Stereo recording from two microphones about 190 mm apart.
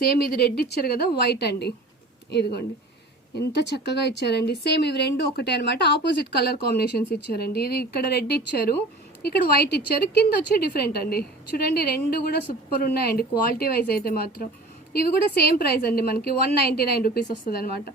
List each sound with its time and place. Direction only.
0.3 s a woman's voice: 55° left (ahead or behind)